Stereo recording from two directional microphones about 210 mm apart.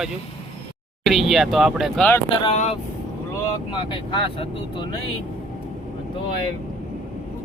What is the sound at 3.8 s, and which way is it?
Speech, 25° left (ahead or behind).